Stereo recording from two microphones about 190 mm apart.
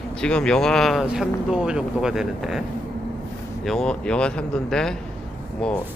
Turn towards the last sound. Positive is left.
turn(degrees=5)  # may be behind; listen again after turning